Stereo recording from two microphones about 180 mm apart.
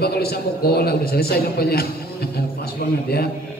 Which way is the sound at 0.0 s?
60° left (ahead or behind).